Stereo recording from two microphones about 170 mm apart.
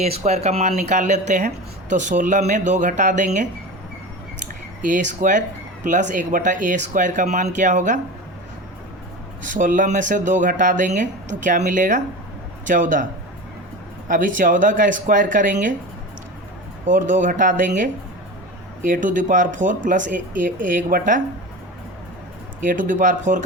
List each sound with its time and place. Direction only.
0.0 s speech: 40° right (ahead or behind)
4.8 s speech: 50° right (ahead or behind)
9.4 s speech: 50° right (ahead or behind)
14.1 s speech: 50° right (ahead or behind)
16.8 s speech: 50° right (ahead or behind)
18.8 s speech: 50° right (ahead or behind)
22.6 s speech: 50° right (ahead or behind)